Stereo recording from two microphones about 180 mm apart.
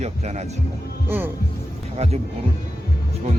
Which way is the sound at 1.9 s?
35° right (ahead or behind).